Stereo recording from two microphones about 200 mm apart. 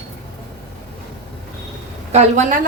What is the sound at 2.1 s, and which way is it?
Speech, 35° right (ahead or behind).